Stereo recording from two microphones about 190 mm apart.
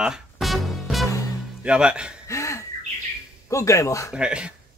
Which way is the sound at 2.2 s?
15° left (ahead or behind).